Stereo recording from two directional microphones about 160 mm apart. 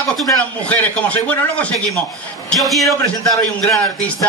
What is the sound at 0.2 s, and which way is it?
A man's voice, 5° left (ahead or behind).